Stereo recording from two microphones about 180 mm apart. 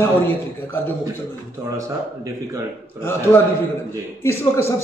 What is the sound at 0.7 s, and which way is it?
Mantra, 10° left (ahead or behind).